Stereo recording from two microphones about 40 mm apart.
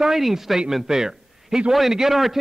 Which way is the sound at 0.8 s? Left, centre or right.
Centre.